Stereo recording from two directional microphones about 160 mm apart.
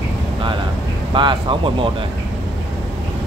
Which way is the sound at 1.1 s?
30° right (ahead or behind).